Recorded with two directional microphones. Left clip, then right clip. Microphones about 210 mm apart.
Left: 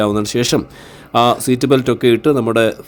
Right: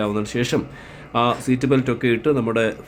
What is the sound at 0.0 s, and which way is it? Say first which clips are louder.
Speech: left 7 dB; 30° left (ahead or behind).